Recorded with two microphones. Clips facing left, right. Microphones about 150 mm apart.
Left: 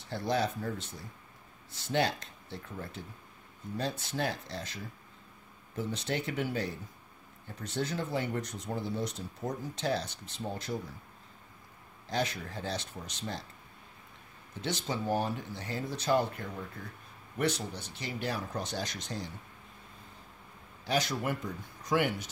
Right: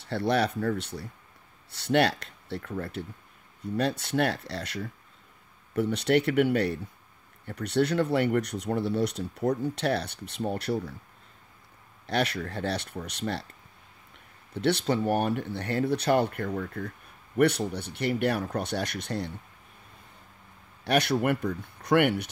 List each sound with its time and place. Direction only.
0.0 s speech: 70° right (ahead or behind)
12.1 s speech: 70° right (ahead or behind)
14.5 s speech: 65° right (ahead or behind)
20.8 s speech: 65° right (ahead or behind)